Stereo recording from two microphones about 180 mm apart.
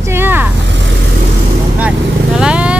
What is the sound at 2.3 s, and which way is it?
Speech, 5° right (ahead or behind).